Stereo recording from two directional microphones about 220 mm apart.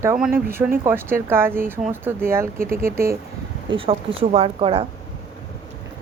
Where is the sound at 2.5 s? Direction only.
40° right (ahead or behind).